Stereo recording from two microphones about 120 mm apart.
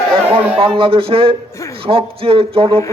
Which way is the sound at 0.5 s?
50° right (ahead or behind).